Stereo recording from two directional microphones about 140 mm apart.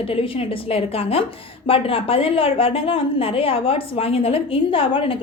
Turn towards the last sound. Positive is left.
turn(degrees=40)  # may be behind; listen again after turning